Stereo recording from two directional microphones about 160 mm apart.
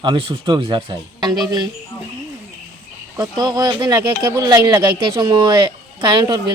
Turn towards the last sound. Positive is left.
turn(degrees=-30)  # may be behind; listen again after turning